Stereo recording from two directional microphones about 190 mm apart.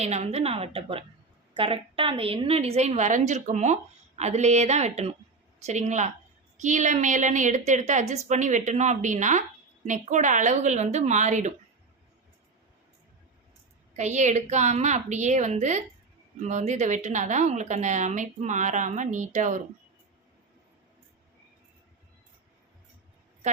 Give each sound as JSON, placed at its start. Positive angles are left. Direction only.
{"t": 0.0, "sound": "a woman's voice", "side_deg": -35}
{"t": 13.9, "sound": "a woman's voice", "side_deg": -40}